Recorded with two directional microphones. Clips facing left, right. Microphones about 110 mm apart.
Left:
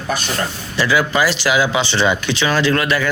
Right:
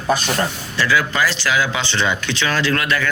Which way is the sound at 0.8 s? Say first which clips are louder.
Left 2 dB; 15° left (ahead or behind).